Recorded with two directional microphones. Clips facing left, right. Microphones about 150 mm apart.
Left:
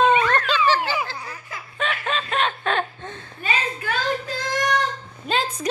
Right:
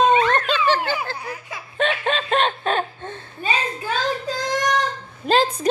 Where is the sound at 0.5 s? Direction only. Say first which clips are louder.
Right 1 dB; 55° right (ahead or behind).